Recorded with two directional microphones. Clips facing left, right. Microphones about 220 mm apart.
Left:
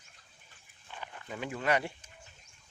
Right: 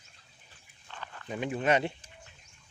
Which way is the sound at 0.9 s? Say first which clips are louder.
Even; 15° left (ahead or behind).